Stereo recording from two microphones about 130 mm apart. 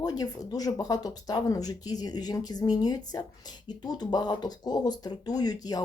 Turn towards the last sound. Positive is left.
turn(degrees=30)  # may be behind; listen again after turning